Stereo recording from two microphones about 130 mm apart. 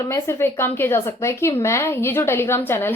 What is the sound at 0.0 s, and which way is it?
A woman's voice, 25° left (ahead or behind).